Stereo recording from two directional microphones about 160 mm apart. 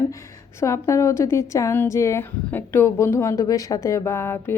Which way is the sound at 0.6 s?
20° left (ahead or behind).